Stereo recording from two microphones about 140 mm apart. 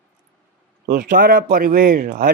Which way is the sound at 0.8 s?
70° right (ahead or behind).